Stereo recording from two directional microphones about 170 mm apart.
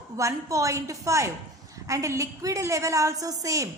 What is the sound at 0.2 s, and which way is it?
A woman's voice, 20° right (ahead or behind).